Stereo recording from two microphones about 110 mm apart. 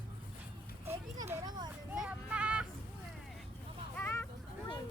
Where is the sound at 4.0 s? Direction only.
20° left (ahead or behind).